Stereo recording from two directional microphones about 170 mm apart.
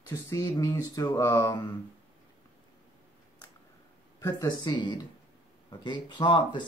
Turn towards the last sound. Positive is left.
turn(degrees=25)  # may be behind; listen again after turning